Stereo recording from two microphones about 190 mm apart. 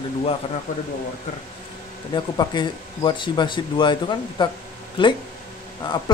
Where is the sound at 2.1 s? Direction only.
25° left (ahead or behind).